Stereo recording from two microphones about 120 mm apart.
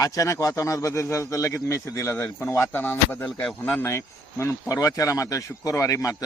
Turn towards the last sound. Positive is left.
turn(degrees=25)  # may be behind; listen again after turning